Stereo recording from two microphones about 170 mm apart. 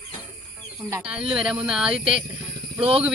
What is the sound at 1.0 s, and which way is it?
Speech, 5° right (ahead or behind).